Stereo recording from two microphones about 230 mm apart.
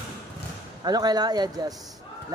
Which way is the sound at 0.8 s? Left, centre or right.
Centre.